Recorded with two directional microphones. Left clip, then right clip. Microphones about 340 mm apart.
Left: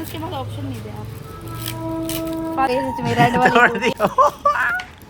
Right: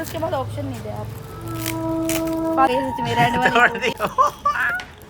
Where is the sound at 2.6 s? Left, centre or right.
Centre.